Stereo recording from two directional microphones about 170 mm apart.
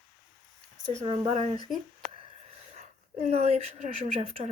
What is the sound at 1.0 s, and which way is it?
Speech, 35° right (ahead or behind).